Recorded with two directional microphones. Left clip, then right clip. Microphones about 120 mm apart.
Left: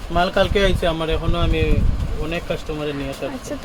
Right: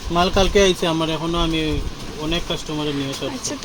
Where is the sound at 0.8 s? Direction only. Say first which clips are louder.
Even; 85° right; by 1.7 s 60° right (ahead or behind).